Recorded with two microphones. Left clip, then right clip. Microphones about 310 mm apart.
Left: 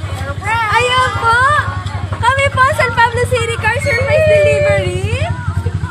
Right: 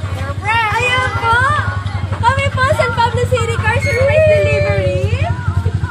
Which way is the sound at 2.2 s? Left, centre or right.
Left.